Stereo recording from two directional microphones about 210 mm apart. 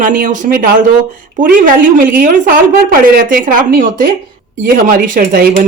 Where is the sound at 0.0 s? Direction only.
40° right (ahead or behind).